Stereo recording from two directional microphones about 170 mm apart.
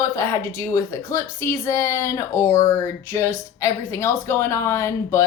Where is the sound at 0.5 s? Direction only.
15° left (ahead or behind).